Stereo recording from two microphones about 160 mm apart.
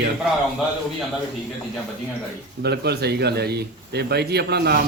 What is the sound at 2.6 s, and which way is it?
A man's voice, 90° right.